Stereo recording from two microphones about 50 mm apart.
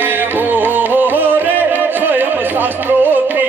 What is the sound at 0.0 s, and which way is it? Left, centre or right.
Music, right.